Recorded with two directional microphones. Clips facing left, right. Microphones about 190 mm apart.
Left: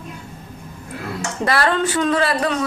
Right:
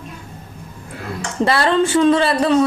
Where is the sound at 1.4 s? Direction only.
25° right (ahead or behind).